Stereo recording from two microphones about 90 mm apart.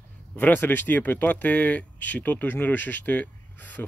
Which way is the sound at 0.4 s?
20° left (ahead or behind).